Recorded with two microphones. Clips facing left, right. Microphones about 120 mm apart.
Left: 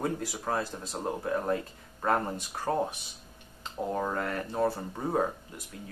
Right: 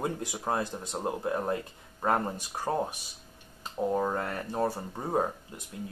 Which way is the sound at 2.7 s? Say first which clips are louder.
Left 1 dB; 10° right (ahead or behind).